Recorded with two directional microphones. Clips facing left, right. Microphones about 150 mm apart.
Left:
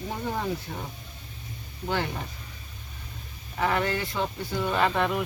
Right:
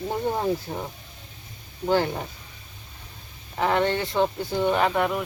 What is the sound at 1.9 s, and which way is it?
Speech, 35° right (ahead or behind).